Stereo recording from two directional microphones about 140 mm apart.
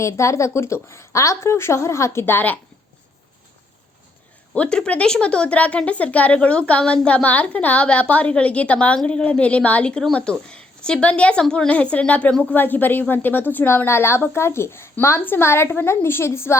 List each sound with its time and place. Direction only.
0.0 s a woman's voice: 20° left (ahead or behind)
4.5 s speech: 5° left (ahead or behind)